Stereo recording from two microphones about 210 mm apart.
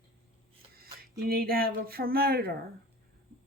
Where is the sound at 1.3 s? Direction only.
45° right (ahead or behind).